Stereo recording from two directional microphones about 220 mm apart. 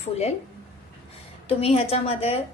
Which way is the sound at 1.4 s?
25° left (ahead or behind).